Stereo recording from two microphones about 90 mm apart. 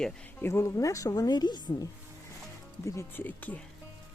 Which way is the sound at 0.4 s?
30° left (ahead or behind).